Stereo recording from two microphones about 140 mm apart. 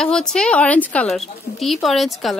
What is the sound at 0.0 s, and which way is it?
A woman's voice, 5° left (ahead or behind).